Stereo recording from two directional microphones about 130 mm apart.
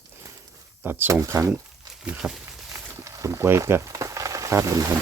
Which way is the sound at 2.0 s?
10° right (ahead or behind).